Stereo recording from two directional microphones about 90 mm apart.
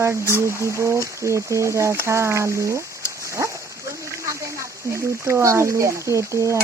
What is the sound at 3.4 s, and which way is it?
Dog, 35° right (ahead or behind).